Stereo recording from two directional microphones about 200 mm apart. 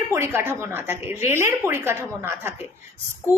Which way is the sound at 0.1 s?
10° right (ahead or behind).